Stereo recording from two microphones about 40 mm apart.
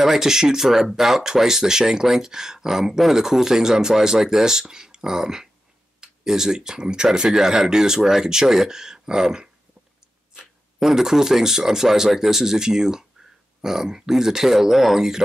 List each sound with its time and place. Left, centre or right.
0.0 s speech: centre
7.2 s speech: centre